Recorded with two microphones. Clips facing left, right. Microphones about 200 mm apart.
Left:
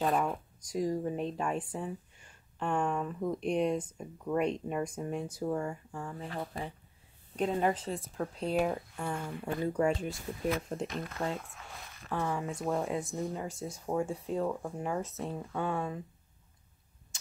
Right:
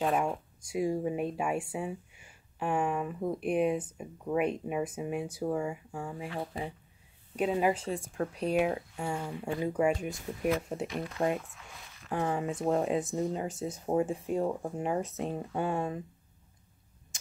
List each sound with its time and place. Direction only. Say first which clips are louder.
0.7 s speech: right 2 dB; 10° right (ahead or behind)
12.1 s speech: right 3 dB; 20° right (ahead or behind)